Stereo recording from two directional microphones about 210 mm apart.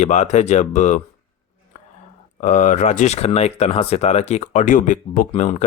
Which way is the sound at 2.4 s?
35° left (ahead or behind).